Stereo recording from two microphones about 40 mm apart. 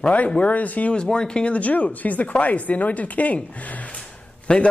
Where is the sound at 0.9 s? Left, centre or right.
Left.